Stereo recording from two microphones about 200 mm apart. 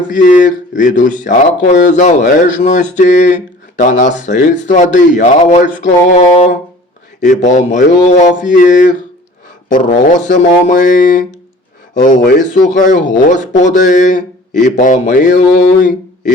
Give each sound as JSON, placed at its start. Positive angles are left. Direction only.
{"t": 0.1, "sound": "speech", "side_deg": 40}